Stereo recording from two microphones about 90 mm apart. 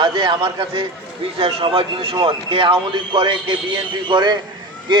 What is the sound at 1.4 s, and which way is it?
A man's voice, 90° right.